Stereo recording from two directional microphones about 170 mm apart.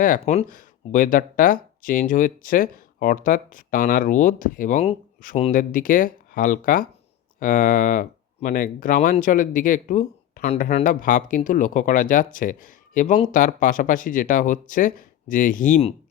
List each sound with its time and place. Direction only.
0.0 s speech: 55° left (ahead or behind)